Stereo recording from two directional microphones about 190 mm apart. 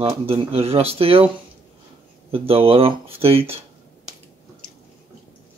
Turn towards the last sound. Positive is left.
turn(degrees=-30)  # may be behind; listen again after turning